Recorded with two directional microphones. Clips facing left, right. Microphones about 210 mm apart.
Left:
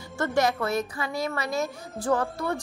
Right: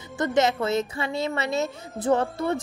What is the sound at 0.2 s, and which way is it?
A woman's voice, 20° right (ahead or behind).